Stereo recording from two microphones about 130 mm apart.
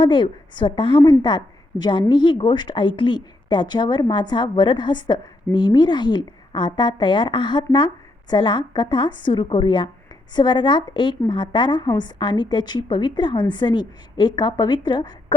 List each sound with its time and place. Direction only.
0.0 s a woman's voice: 35° left (ahead or behind)